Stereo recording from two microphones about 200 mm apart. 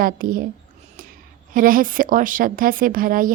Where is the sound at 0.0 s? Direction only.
45° right (ahead or behind).